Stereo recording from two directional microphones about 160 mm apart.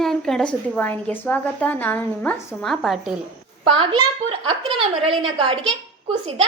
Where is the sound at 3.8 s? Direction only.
35° right (ahead or behind).